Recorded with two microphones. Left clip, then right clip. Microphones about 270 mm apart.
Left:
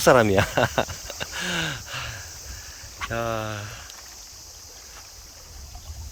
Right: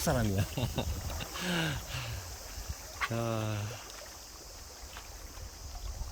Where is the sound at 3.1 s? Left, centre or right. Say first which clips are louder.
Left 8 dB; centre.